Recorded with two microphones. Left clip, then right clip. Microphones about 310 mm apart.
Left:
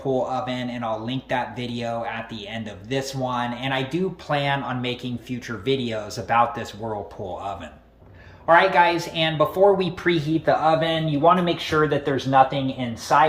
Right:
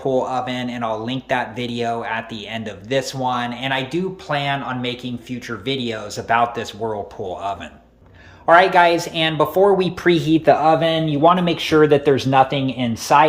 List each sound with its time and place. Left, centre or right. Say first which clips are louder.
0.1 s speech: right 2 dB; centre
8.4 s speech: right 4 dB; centre